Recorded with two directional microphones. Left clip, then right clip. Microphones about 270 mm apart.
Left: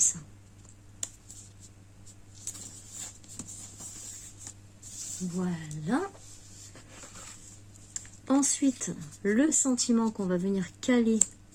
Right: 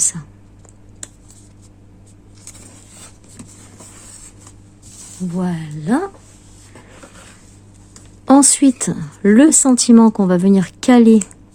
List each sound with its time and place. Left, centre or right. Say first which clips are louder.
5.4 s a woman's voice: right 13 dB; right
8.3 s a woman's voice: right 16 dB; right